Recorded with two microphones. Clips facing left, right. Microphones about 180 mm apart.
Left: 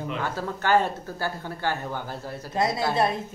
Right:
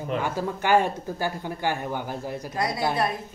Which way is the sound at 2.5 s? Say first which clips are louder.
Left 4 dB; 25° left (ahead or behind).